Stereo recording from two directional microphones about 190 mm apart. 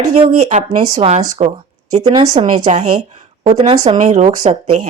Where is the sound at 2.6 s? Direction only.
40° right (ahead or behind).